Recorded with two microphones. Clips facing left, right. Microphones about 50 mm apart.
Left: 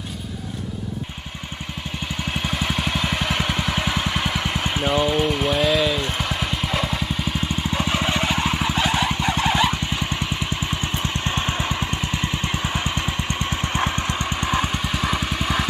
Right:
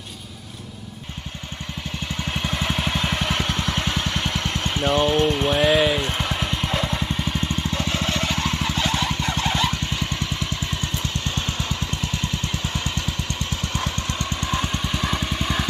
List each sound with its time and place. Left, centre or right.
2.3 s vehicle: centre
5.7 s a sound: centre
6.0 s music: centre
7.3 s vehicle: centre